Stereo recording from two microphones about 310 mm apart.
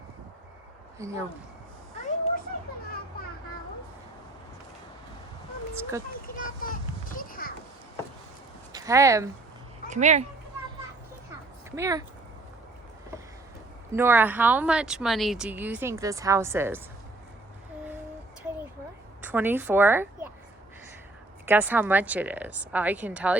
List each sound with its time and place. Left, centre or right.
0.9 s speech: centre
2.0 s vehicle: left
6.2 s children playing: left
8.7 s speech: centre
9.9 s speech: right
11.7 s speech: centre
13.9 s speech: centre
19.2 s a woman's voice: centre
21.4 s speech: centre